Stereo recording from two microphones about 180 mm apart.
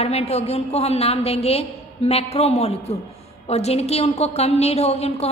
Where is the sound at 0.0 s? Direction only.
35° left (ahead or behind).